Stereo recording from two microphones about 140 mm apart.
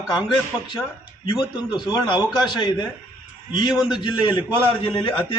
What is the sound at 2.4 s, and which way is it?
A man's voice, 30° left (ahead or behind).